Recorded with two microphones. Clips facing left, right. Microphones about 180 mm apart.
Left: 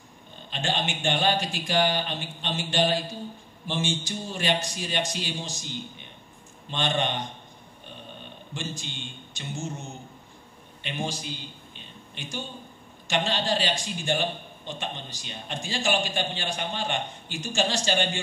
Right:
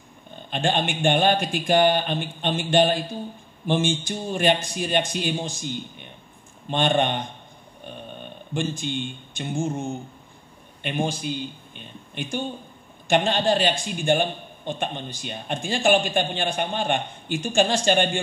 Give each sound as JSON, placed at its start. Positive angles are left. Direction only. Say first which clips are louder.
{"t": 0.5, "sound": "a man's voice", "louder": "right 5 dB", "side_deg": -55}
{"t": 8.5, "sound": "a man's voice", "louder": "right 10 dB", "side_deg": -55}